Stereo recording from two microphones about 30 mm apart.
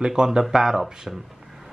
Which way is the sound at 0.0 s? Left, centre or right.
Right.